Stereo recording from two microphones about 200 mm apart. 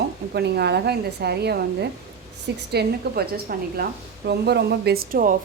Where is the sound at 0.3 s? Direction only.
55° right (ahead or behind).